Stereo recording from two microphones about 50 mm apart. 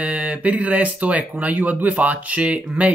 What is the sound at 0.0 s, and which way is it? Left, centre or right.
Speech, right.